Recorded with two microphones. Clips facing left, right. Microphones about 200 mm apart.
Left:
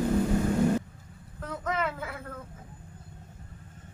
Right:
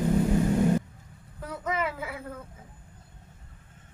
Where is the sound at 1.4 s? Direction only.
10° right (ahead or behind).